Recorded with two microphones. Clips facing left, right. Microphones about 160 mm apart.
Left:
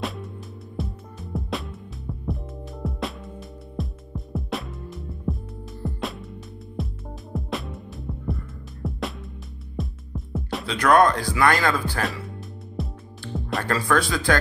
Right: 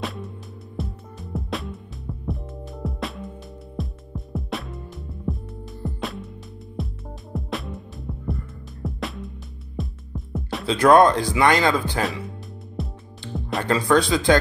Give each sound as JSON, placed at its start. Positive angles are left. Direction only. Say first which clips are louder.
{"t": 0.0, "sound": "music", "louder": "even", "side_deg": 0}
{"t": 10.7, "sound": "speech", "louder": "right 3 dB", "side_deg": -25}
{"t": 12.0, "sound": "speech", "louder": "right 2 dB", "side_deg": 0}
{"t": 12.8, "sound": "music", "louder": "even", "side_deg": 0}
{"t": 13.7, "sound": "speech", "louder": "right 5 dB", "side_deg": -20}